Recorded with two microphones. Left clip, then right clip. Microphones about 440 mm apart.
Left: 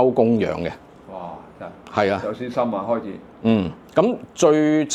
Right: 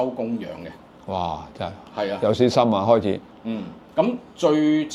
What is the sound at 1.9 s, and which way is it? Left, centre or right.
Speech, left.